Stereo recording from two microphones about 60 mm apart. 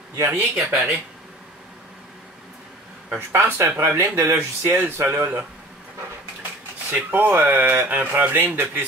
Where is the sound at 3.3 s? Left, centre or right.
Right.